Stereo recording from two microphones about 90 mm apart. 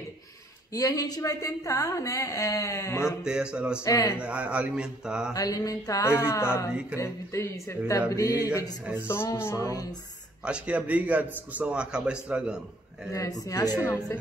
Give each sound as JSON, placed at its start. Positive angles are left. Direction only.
{"t": 0.7, "sound": "a woman's voice", "side_deg": 40}
{"t": 3.3, "sound": "a man's voice", "side_deg": -10}
{"t": 3.8, "sound": "a woman's voice", "side_deg": 35}
{"t": 4.2, "sound": "a man's voice", "side_deg": -15}
{"t": 5.3, "sound": "a woman's voice", "side_deg": 40}
{"t": 6.7, "sound": "a man's voice", "side_deg": -10}
{"t": 7.0, "sound": "a woman's voice", "side_deg": 35}
{"t": 9.0, "sound": "music", "side_deg": 25}
{"t": 10.4, "sound": "a man's voice", "side_deg": -10}
{"t": 13.1, "sound": "a woman's voice", "side_deg": 40}